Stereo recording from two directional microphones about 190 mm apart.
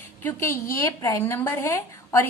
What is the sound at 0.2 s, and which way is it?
A woman's voice, 10° left (ahead or behind).